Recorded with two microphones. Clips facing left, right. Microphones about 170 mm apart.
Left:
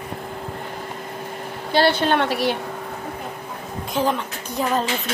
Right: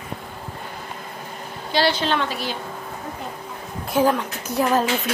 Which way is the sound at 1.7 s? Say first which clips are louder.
Left 3 dB; 55° left (ahead or behind).